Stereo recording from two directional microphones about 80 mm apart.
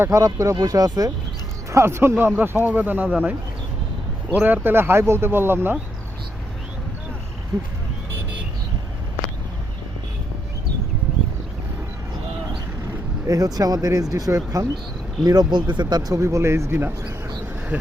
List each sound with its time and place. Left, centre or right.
0.0 s speech: right
1.7 s speech: right
4.4 s speech: right
13.2 s speech: right
15.2 s speech: right
16.2 s speech: right